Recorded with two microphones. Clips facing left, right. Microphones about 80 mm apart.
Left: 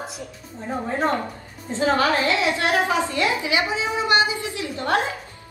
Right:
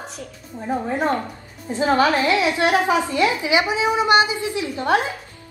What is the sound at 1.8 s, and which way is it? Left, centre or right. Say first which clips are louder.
A woman's voice: right 2 dB; right.